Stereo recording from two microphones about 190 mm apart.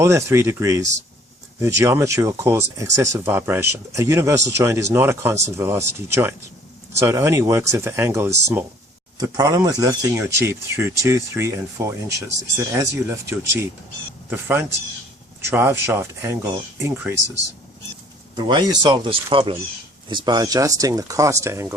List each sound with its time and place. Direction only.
0.0 s speech: 15° right (ahead or behind)
18.3 s speech: 20° right (ahead or behind)